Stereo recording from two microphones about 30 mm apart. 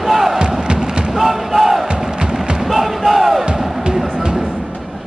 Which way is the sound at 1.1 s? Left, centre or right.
Centre.